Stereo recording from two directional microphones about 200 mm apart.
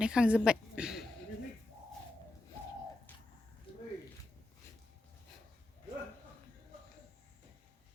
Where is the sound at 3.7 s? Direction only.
25° left (ahead or behind).